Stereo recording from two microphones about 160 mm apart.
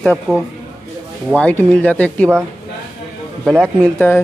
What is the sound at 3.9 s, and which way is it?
Speech, 10° left (ahead or behind).